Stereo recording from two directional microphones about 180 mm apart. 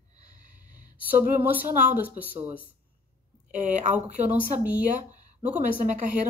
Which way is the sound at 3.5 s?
45° right (ahead or behind).